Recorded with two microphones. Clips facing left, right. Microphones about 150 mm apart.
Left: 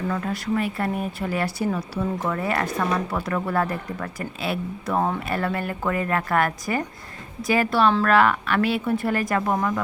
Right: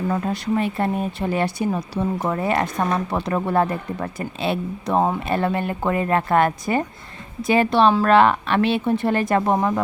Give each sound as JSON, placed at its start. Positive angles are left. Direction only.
{"t": 0.1, "sound": "speech", "side_deg": -25}